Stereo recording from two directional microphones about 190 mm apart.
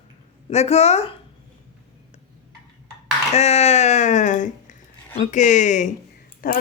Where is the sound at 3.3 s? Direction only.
35° left (ahead or behind).